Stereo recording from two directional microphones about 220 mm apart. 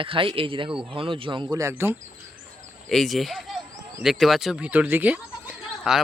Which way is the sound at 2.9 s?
Centre (ahead or behind).